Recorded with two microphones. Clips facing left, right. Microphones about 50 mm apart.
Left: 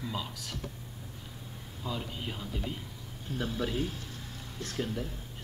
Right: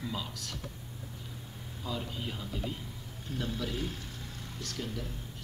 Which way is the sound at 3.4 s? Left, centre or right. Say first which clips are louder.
Left 4 dB; left.